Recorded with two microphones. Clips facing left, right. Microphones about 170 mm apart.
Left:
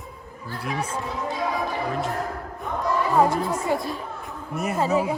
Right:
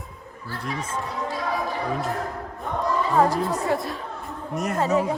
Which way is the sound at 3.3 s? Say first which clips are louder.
Even; centre (ahead or behind).